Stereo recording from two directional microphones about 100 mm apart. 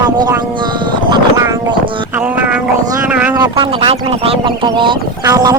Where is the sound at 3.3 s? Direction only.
40° right (ahead or behind).